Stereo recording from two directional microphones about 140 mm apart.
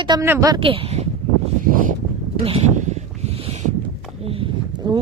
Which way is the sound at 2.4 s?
50° right (ahead or behind).